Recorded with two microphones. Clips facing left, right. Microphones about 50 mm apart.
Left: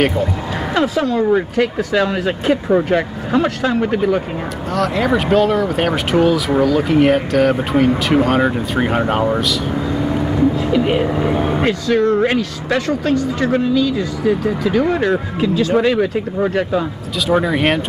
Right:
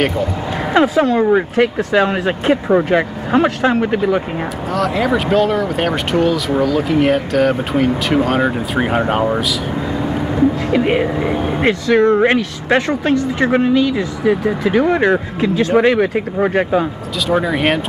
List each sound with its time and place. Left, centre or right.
0.7 s speech: right
4.7 s speech: centre
10.7 s speech: right
11.3 s speech: centre
11.6 s speech: right
17.3 s speech: centre